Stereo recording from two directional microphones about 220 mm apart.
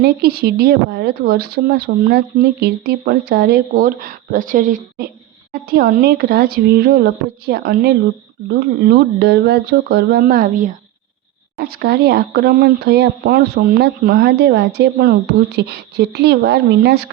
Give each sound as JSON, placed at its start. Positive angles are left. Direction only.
{"t": 0.0, "sound": "speech", "side_deg": -45}